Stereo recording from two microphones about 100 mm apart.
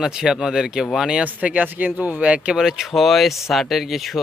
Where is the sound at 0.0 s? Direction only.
5° right (ahead or behind).